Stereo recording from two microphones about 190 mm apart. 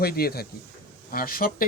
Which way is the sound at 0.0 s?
55° left (ahead or behind).